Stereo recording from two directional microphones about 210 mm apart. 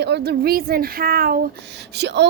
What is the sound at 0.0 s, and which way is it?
A woman's voice, 50° right (ahead or behind).